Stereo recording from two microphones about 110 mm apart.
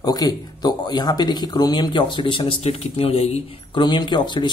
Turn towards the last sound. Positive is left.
turn(degrees=45)  # may be behind; listen again after turning